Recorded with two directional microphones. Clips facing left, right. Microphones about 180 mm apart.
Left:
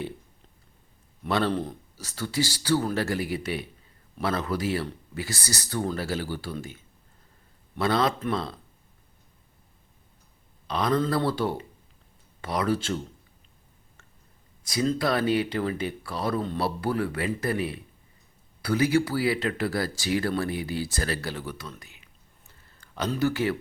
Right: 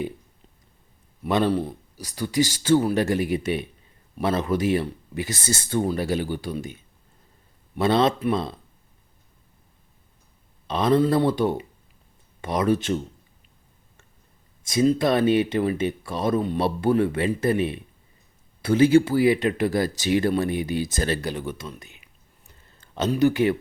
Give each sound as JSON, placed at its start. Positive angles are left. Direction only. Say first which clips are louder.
{"t": 1.2, "sound": "speech", "louder": "right 4 dB", "side_deg": -15}
{"t": 10.7, "sound": "speech", "louder": "right 5 dB", "side_deg": -25}
{"t": 14.6, "sound": "speech", "louder": "right 6 dB", "side_deg": -20}